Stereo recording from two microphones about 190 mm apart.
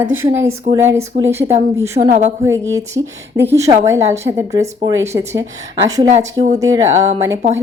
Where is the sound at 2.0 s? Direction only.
35° right (ahead or behind).